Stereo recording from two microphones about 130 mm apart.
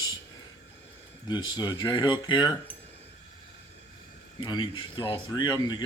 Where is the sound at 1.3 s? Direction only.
35° left (ahead or behind).